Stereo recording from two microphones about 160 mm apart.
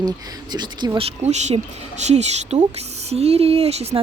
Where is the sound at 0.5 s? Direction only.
25° right (ahead or behind).